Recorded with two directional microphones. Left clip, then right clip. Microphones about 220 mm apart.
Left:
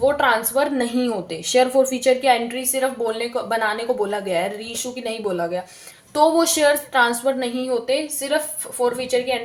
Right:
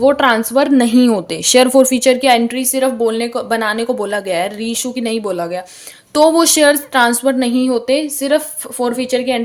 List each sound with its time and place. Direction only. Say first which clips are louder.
0.0 s a woman's voice: right 6 dB; 50° right (ahead or behind)